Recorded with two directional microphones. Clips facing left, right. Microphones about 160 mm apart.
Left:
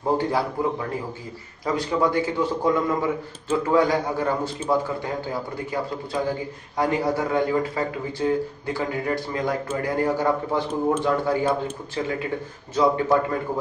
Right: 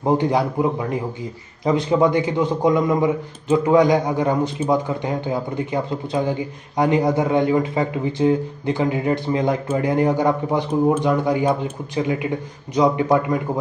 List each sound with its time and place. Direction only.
0.0 s a man's voice: 20° right (ahead or behind)